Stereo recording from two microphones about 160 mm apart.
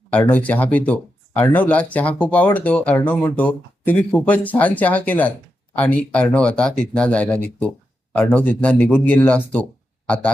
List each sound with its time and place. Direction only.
0.1 s speech: 10° left (ahead or behind)